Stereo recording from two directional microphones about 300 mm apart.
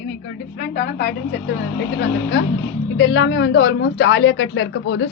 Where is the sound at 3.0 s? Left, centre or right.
Left.